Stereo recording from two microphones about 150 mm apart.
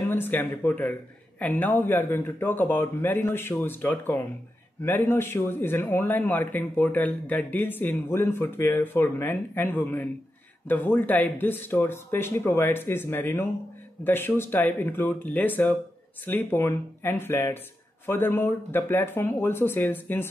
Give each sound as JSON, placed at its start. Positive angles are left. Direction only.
{"t": 0.1, "sound": "speech", "side_deg": 15}